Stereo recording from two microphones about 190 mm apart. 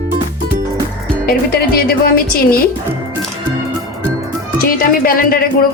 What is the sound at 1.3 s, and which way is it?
Speech, 55° left (ahead or behind).